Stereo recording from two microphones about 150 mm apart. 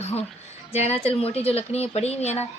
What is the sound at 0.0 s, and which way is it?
A woman's voice, 45° left (ahead or behind).